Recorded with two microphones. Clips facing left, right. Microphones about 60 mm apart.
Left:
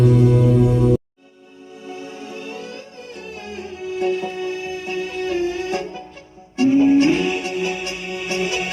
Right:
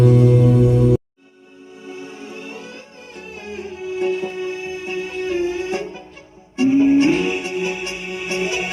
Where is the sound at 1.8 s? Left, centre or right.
Right.